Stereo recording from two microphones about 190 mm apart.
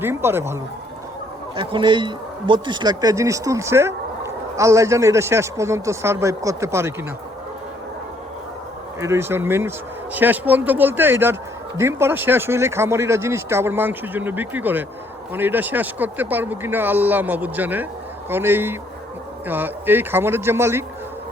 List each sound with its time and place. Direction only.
0.0 s speech: 10° right (ahead or behind)
1.5 s speech: 25° right (ahead or behind)
9.0 s speech: 15° right (ahead or behind)